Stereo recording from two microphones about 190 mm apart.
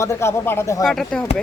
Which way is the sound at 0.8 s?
Centre (ahead or behind).